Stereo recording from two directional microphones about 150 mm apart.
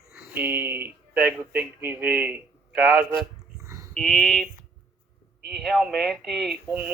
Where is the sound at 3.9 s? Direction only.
10° left (ahead or behind).